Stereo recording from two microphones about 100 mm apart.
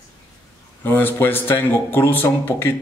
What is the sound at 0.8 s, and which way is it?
A man's voice, 20° left (ahead or behind).